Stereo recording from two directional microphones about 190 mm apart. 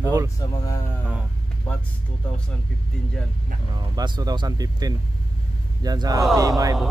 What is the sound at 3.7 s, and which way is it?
Speech, 20° right (ahead or behind).